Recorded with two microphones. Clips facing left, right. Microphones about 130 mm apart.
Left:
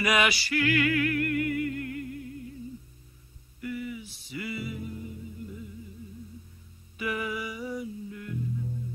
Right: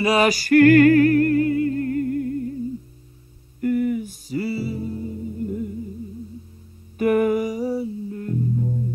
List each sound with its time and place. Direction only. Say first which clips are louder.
0.0 s music: right 7 dB; 35° right (ahead or behind)
3.6 s music: right 14 dB; 50° right (ahead or behind)
7.0 s music: right 14 dB; 50° right (ahead or behind)